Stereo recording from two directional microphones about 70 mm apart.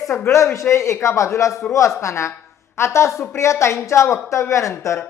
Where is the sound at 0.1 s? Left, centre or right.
Left.